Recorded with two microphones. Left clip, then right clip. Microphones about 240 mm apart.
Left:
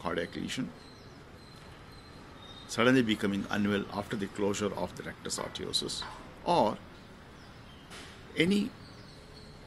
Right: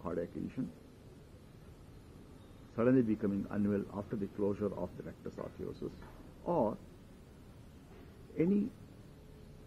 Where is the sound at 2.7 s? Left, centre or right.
Centre.